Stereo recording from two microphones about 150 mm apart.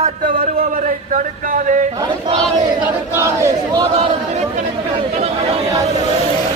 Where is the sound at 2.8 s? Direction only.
15° right (ahead or behind).